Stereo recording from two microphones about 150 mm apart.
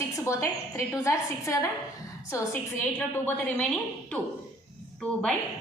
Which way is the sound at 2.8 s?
10° left (ahead or behind).